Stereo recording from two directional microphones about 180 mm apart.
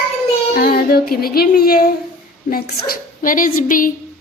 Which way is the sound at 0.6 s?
55° left (ahead or behind).